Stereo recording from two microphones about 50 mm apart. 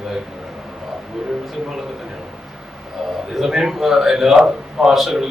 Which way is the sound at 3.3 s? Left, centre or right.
Centre.